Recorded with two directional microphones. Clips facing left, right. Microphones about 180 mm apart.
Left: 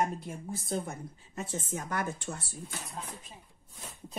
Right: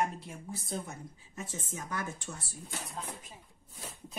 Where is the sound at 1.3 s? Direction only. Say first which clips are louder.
Left 5 dB; 65° left (ahead or behind).